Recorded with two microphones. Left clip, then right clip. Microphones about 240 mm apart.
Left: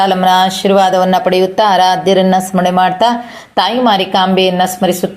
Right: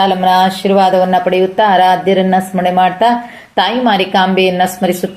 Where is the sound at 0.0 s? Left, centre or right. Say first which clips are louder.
Even; left.